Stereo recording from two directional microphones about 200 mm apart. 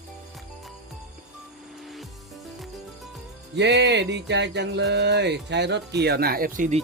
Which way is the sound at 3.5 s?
60° right (ahead or behind).